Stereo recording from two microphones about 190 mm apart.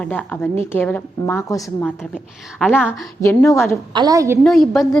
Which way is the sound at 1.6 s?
Centre (ahead or behind).